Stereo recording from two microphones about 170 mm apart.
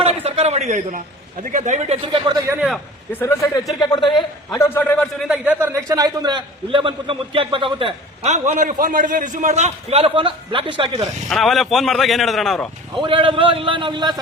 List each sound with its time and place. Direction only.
0.0 s a sound: 35° right (ahead or behind)
1.5 s a man's voice: 50° right (ahead or behind); by 2.3 s 30° right (ahead or behind)
2.6 s a man's voice: centre (ahead or behind)
3.1 s a man's voice: 15° left (ahead or behind)
3.8 s a man's voice: 25° left (ahead or behind)
5.3 s a man's voice: 10° right (ahead or behind); by 11.1 s 30° right (ahead or behind)
11.3 s a man's voice: centre (ahead or behind)
13.0 s a man's voice: 30° right (ahead or behind)